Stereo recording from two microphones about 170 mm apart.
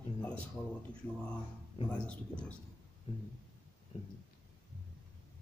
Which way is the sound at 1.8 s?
5° left (ahead or behind).